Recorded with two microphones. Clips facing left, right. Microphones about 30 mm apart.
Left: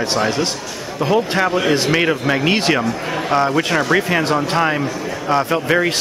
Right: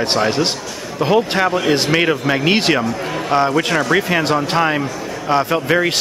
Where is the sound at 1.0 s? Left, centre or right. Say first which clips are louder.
Right 1 dB; centre.